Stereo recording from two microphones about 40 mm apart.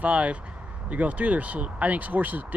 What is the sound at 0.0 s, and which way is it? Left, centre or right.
Speech, right.